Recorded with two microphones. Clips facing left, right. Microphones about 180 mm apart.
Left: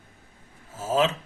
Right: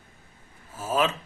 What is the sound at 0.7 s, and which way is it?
Speech, 25° left (ahead or behind).